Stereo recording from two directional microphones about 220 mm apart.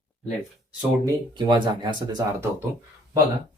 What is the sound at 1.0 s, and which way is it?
Speech, 20° right (ahead or behind).